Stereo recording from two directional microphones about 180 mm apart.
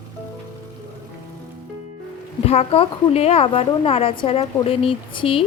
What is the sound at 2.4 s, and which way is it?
Speech, 35° left (ahead or behind).